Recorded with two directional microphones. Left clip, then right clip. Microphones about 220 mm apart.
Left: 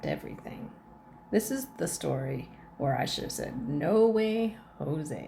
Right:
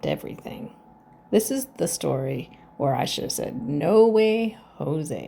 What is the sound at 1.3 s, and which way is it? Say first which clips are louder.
Speech: right 7 dB; 30° right (ahead or behind).